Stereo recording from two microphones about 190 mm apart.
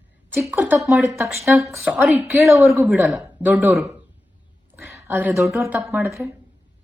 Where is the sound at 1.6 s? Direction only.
15° right (ahead or behind).